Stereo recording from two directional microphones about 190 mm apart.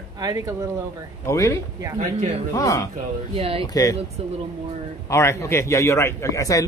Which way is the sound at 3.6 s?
20° left (ahead or behind).